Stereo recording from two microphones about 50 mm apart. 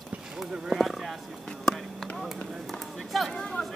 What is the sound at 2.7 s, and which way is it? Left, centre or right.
Speech, centre.